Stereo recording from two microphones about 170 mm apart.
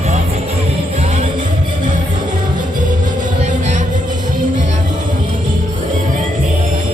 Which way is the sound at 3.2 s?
45° right (ahead or behind).